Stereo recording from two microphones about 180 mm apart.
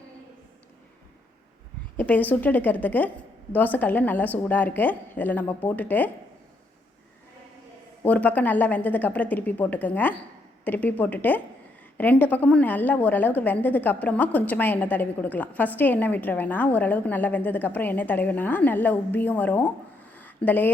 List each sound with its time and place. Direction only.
2.0 s a woman's voice: 10° left (ahead or behind)
8.0 s a woman's voice: 10° left (ahead or behind)